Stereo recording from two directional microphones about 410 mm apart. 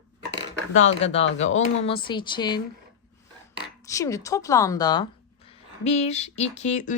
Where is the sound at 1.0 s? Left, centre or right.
Centre.